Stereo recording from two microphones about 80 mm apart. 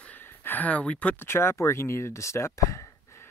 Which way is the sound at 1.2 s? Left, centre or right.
Left.